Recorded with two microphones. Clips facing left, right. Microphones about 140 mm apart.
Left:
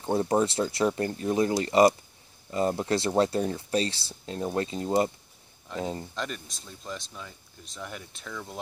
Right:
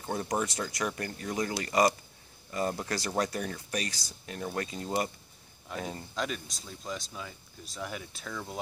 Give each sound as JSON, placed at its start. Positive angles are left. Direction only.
{"t": 0.0, "sound": "speech", "side_deg": 25}
{"t": 6.1, "sound": "speech", "side_deg": 0}